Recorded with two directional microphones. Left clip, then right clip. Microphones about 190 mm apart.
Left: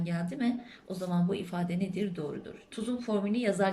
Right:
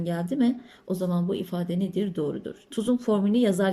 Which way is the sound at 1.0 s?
25° right (ahead or behind).